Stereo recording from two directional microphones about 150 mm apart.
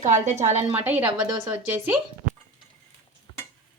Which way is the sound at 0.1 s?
50° right (ahead or behind).